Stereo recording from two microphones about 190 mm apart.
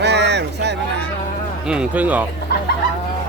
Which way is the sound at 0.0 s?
65° right (ahead or behind).